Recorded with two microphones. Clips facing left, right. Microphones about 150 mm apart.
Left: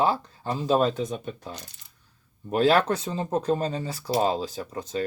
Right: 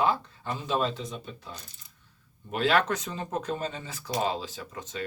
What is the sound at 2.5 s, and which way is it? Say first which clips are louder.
Speech: left 5 dB; 35° left (ahead or behind).